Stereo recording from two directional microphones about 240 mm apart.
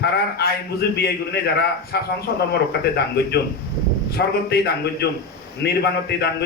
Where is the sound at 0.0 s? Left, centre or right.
Left.